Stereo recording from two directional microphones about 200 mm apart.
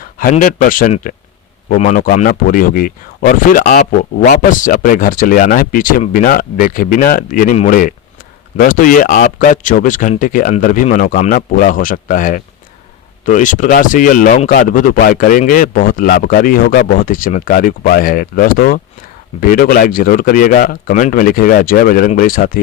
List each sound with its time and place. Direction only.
0.0 s speech: 45° left (ahead or behind)